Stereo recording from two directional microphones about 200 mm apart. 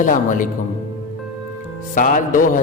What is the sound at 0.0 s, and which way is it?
Speech, 40° left (ahead or behind).